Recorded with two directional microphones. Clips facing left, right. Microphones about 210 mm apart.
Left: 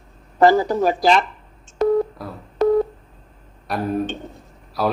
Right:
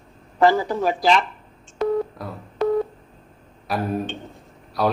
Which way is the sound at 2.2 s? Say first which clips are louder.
Even; centre (ahead or behind).